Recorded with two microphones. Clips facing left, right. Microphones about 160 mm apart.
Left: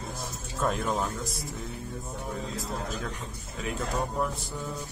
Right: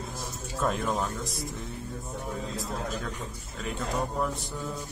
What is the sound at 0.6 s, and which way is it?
Speech, centre (ahead or behind).